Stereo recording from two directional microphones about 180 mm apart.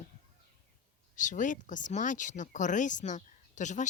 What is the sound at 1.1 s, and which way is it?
Speech, 45° left (ahead or behind).